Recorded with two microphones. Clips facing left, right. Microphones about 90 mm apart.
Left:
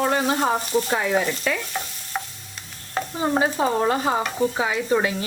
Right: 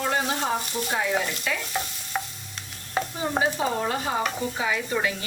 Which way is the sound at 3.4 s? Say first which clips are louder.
Left 3 dB; 40° left (ahead or behind).